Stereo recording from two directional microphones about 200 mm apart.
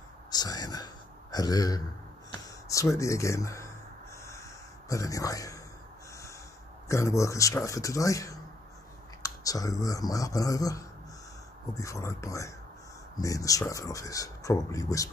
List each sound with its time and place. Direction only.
0.3 s speech: 20° left (ahead or behind)
4.2 s a sound: 15° left (ahead or behind)
6.9 s speech: 15° left (ahead or behind)